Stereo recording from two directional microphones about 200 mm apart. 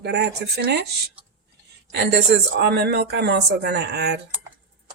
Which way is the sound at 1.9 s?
60° right (ahead or behind).